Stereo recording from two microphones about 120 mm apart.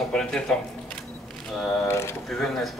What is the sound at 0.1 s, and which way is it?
Speech, 5° left (ahead or behind).